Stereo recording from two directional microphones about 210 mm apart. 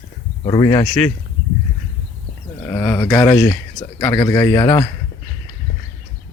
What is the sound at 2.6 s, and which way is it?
Speech, 15° left (ahead or behind).